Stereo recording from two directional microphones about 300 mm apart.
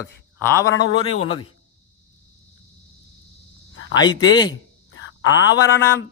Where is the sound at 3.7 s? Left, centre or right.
Left.